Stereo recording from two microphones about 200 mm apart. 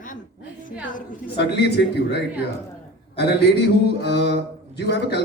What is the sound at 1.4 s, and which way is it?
A man's voice, 55° left (ahead or behind).